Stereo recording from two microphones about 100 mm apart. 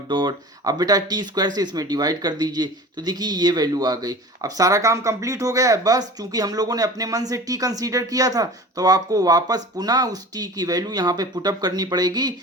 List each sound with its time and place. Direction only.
0.1 s speech: 50° right (ahead or behind)